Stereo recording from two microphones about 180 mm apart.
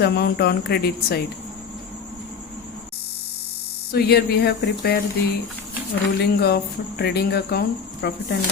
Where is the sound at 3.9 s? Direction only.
65° left (ahead or behind).